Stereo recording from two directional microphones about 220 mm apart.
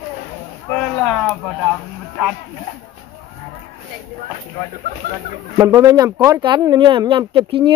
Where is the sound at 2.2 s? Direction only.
5° right (ahead or behind).